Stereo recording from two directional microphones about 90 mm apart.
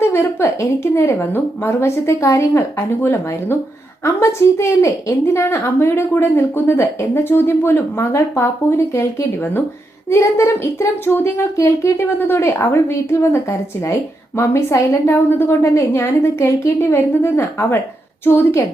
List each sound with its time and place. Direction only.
0.0 s speech: 30° left (ahead or behind)